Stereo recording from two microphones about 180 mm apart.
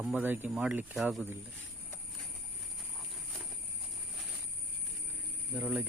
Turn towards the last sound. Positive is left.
turn(degrees=-10)  # may be behind; listen again after turning